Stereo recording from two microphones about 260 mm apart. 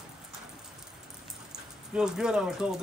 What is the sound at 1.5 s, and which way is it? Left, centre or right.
Speech, centre.